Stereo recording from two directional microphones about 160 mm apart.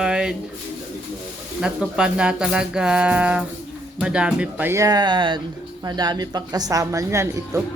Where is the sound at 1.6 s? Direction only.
5° right (ahead or behind).